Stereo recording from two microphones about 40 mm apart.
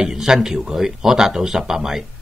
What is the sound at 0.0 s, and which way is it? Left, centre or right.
Speech, centre.